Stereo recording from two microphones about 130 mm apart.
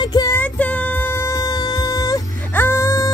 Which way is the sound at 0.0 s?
30° left (ahead or behind).